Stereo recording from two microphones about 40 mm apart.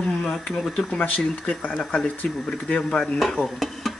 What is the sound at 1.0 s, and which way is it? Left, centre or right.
Speech, left.